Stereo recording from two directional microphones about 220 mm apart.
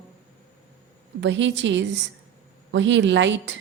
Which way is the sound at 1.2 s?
55° right (ahead or behind).